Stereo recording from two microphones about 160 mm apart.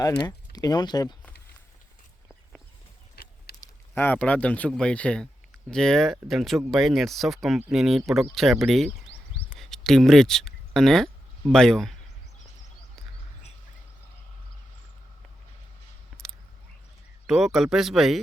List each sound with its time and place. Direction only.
0.0 s speech: 25° left (ahead or behind)
3.6 s speech: 10° left (ahead or behind)
17.2 s speech: 5° right (ahead or behind)